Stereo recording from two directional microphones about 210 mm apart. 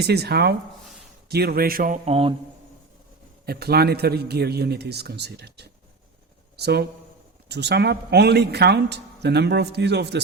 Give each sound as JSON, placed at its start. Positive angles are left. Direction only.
{"t": 0.0, "sound": "speech", "side_deg": -50}
{"t": 3.4, "sound": "speech", "side_deg": -50}